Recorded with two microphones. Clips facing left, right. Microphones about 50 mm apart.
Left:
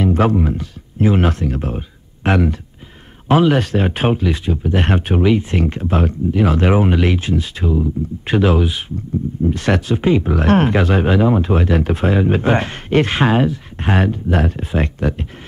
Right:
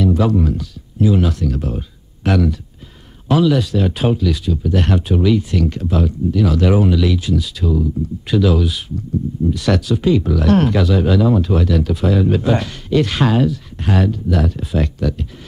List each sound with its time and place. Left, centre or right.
0.0 s music: left
0.4 s speech: left